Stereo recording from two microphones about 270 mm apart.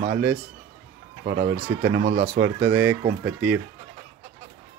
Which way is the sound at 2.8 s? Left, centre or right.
Centre.